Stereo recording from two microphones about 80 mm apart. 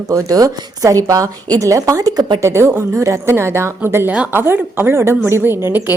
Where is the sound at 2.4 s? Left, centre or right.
Right.